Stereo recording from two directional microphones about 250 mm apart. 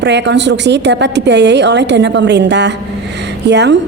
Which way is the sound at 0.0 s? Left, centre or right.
Right.